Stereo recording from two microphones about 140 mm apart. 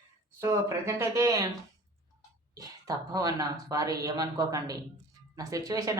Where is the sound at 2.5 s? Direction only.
25° right (ahead or behind).